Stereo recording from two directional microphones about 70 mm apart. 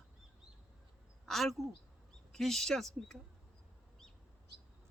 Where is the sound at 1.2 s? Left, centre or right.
Centre.